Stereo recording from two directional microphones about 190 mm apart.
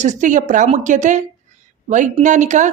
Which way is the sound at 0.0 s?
40° right (ahead or behind).